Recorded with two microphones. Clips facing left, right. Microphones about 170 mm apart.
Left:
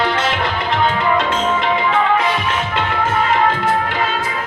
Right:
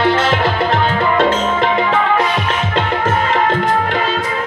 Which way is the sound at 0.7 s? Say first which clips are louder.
Right 1 dB; 45° right (ahead or behind).